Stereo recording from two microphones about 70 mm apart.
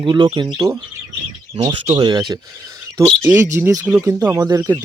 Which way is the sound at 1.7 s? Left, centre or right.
Right.